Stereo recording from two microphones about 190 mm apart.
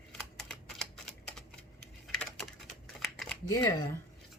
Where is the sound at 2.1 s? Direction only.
5° left (ahead or behind).